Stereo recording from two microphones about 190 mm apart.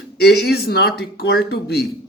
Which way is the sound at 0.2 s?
60° left (ahead or behind).